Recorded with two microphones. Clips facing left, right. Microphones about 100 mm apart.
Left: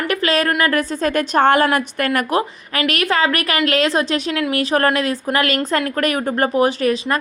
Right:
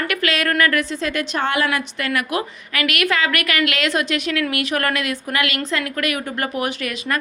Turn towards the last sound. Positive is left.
turn(degrees=35)  # may be behind; listen again after turning